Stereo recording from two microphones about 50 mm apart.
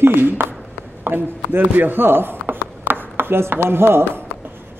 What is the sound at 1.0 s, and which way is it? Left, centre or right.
A man's voice, right.